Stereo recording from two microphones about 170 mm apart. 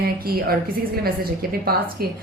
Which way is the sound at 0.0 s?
65° right (ahead or behind).